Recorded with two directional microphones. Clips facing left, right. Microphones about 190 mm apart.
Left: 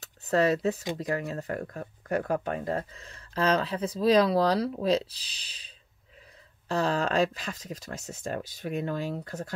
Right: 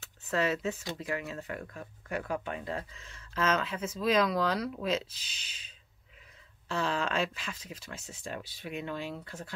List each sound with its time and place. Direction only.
0.0 s speech: 40° left (ahead or behind)
6.7 s speech: 40° left (ahead or behind)